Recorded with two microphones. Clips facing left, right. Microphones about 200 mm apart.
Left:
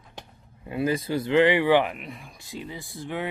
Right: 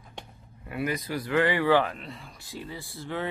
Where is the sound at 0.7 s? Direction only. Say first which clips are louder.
Left 5 dB; 25° left (ahead or behind).